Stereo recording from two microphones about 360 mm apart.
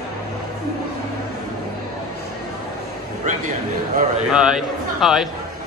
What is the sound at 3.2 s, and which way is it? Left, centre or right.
Speech, centre.